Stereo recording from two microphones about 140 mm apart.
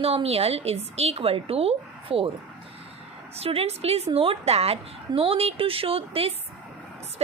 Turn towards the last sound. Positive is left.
turn(degrees=-45)  # may be behind; listen again after turning